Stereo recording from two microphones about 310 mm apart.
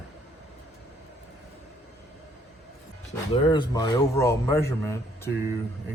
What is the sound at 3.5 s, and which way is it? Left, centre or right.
A man's voice, centre.